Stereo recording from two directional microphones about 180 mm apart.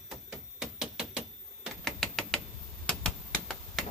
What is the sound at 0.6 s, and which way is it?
Typewriter, 5° right (ahead or behind).